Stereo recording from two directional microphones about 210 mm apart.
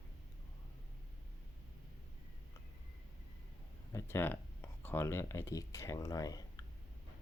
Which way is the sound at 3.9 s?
15° left (ahead or behind).